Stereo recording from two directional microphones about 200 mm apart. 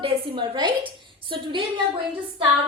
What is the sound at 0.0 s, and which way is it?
A woman's voice, 25° right (ahead or behind).